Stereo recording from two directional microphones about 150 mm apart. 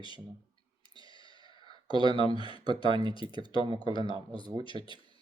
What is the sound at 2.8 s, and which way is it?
Speech, 35° left (ahead or behind).